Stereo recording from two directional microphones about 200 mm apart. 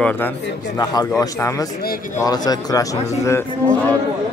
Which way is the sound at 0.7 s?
20° left (ahead or behind).